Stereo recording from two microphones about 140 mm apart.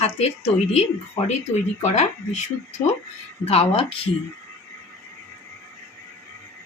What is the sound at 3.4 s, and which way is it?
Speech, 45° left (ahead or behind).